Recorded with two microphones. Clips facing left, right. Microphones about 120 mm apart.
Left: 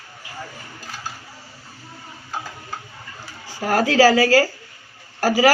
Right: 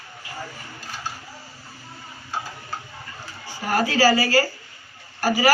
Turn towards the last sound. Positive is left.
turn(degrees=90)